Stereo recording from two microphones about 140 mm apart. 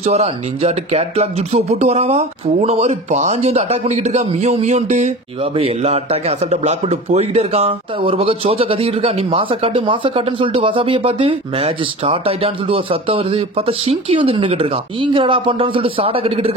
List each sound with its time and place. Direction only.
0.0 s speech: 50° right (ahead or behind)